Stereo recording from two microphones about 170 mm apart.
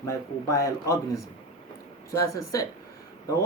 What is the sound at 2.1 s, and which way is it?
Speech, 20° left (ahead or behind).